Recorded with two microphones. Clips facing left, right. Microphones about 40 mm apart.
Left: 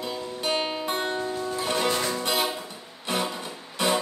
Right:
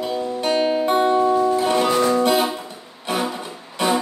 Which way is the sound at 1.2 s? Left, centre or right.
Right.